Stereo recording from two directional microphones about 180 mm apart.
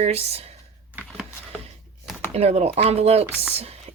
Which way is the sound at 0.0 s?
35° right (ahead or behind).